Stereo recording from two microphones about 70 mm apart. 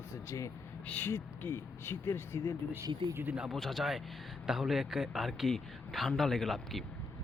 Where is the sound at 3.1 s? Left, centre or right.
Right.